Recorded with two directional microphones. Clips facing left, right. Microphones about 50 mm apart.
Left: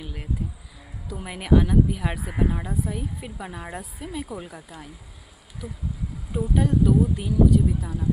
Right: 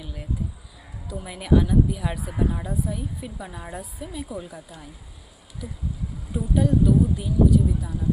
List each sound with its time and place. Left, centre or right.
0.0 s music: left
1.0 s a woman's voice: left
2.3 s a woman's voice: left
4.5 s speech: left
6.3 s a woman's voice: left